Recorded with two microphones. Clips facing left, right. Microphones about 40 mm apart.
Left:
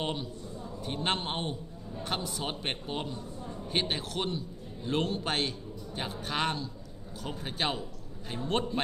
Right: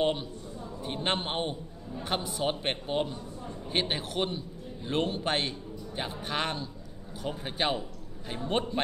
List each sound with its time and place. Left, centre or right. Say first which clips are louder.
0.0 s a man's voice: right 6 dB; centre